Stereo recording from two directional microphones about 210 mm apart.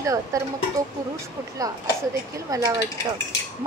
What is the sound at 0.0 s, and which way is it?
Speech, 15° right (ahead or behind).